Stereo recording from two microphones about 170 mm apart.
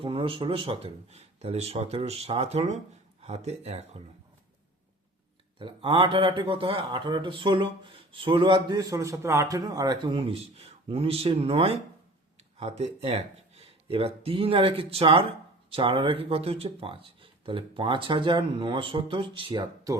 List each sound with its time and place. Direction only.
0.0 s speech: 30° right (ahead or behind)
5.5 s speech: 30° right (ahead or behind)